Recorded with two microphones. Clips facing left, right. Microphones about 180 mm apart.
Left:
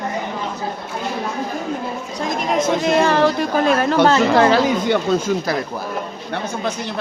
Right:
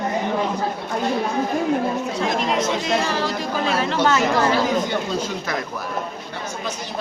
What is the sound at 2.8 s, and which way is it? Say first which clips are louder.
Speech: left 7 dB; 60° left (ahead or behind).